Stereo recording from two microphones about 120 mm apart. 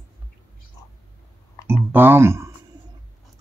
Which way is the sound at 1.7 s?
20° right (ahead or behind).